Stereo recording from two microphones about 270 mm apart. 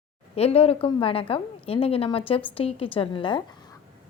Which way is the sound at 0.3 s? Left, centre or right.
Left.